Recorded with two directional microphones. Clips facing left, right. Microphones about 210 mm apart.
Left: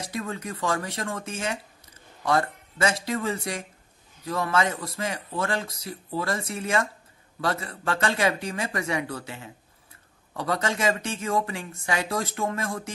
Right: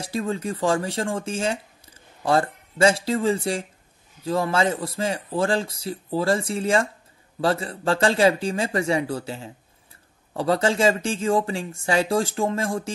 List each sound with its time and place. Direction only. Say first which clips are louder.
0.0 s a man's voice: right 6 dB; 30° right (ahead or behind)